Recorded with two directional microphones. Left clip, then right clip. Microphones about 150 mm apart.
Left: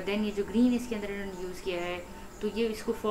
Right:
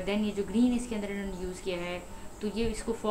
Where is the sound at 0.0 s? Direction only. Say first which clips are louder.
Even; 15° right (ahead or behind).